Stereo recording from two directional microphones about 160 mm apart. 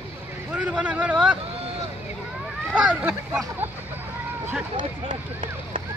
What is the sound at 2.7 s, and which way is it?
Speech, 10° right (ahead or behind).